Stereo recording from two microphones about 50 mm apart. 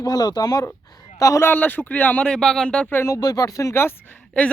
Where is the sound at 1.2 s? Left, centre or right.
Left.